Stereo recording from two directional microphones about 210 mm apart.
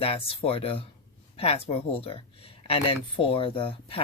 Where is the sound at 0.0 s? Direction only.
25° left (ahead or behind).